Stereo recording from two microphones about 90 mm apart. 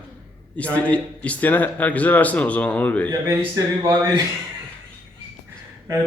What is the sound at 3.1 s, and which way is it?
Speech, 40° right (ahead or behind).